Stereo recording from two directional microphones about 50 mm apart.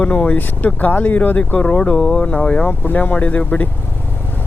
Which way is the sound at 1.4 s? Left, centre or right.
Left.